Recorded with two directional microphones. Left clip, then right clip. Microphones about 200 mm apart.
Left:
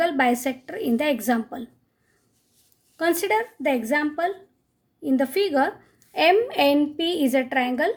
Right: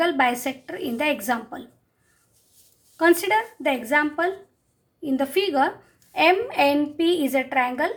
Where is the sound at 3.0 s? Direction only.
45° left (ahead or behind).